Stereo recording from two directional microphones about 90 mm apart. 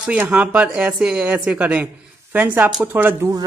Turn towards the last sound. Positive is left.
turn(degrees=-25)  # may be behind; listen again after turning